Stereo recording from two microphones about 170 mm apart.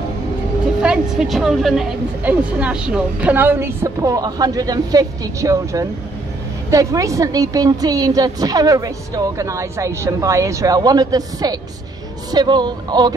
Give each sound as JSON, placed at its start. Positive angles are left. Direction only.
{"t": 0.8, "sound": "a woman's voice", "side_deg": 0}